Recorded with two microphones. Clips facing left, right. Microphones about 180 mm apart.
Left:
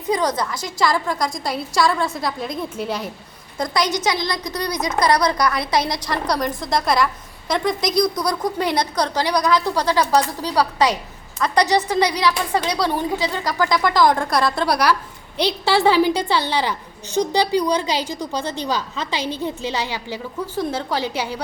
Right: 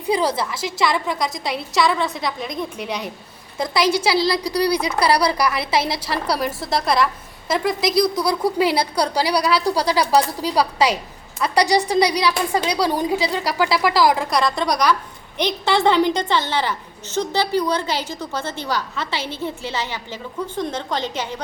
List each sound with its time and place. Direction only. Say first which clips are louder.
0.1 s a woman's voice: even; 10° right (ahead or behind)
4.0 s a woman's voice: right 4 dB; 30° right (ahead or behind)
4.8 s a woman's voice: even; 10° right (ahead or behind); by 21.4 s 10° left (ahead or behind)